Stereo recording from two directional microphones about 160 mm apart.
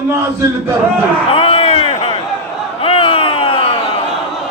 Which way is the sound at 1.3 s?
35° left (ahead or behind).